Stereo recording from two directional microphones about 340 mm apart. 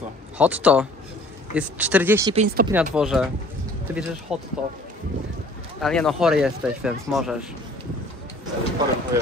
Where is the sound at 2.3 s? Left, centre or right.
Right.